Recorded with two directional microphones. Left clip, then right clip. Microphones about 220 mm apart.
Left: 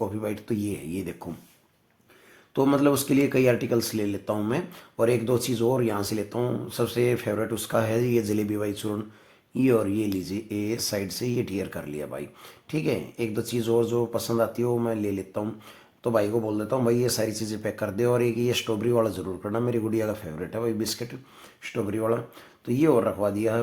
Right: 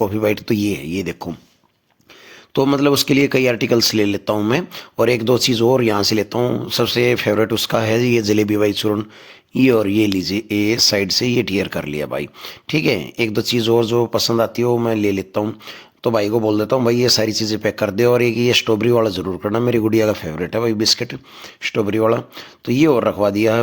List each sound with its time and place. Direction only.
0.0 s speech: 35° right (ahead or behind)
2.5 s speech: 35° right (ahead or behind)